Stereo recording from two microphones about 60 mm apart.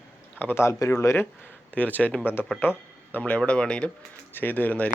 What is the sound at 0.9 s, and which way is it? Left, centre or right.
Speech, left.